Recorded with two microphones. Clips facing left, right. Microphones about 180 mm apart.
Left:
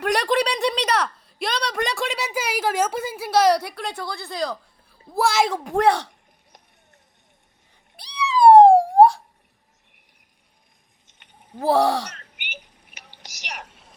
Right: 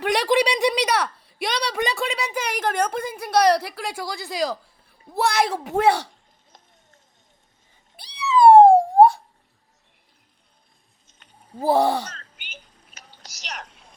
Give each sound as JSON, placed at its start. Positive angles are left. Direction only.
{"t": 0.0, "sound": "a sound", "side_deg": -5}
{"t": 5.0, "sound": "speech", "side_deg": 0}
{"t": 8.0, "sound": "cat", "side_deg": 60}
{"t": 8.4, "sound": "a sound", "side_deg": 0}
{"t": 11.5, "sound": "speech", "side_deg": 0}
{"t": 13.1, "sound": "whispering", "side_deg": 10}